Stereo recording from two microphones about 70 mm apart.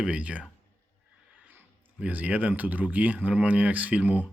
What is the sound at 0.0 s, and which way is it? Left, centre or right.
Speech, centre.